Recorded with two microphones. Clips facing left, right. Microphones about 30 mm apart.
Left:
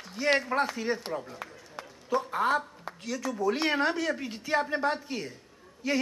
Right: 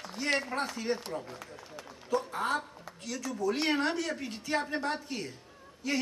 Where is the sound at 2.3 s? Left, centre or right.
Centre.